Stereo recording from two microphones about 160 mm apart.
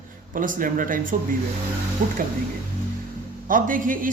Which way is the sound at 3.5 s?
60° right (ahead or behind).